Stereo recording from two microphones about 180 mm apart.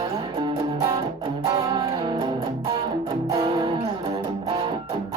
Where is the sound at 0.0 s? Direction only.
30° right (ahead or behind).